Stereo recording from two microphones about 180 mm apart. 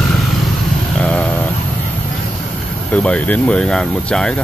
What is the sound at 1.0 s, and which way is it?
Speech, 5° left (ahead or behind).